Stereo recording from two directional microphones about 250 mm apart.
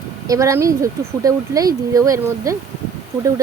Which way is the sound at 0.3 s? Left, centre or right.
Centre.